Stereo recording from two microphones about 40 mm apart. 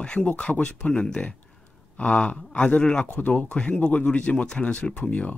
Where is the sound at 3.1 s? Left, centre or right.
Left.